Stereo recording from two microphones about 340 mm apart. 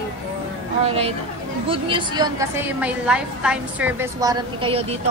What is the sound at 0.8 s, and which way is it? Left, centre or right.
A woman's voice, centre.